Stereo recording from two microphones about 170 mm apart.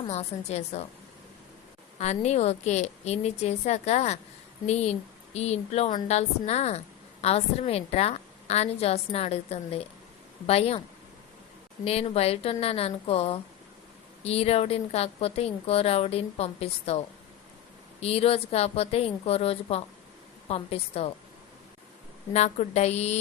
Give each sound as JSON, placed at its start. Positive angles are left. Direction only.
{"t": 0.1, "sound": "speech", "side_deg": 40}
{"t": 2.0, "sound": "speech", "side_deg": 40}
{"t": 11.9, "sound": "speech", "side_deg": 35}
{"t": 18.0, "sound": "speech", "side_deg": 35}
{"t": 22.3, "sound": "speech", "side_deg": 40}